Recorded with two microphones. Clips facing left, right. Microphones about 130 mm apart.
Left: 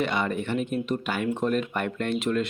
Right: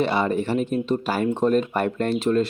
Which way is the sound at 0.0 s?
30° right (ahead or behind).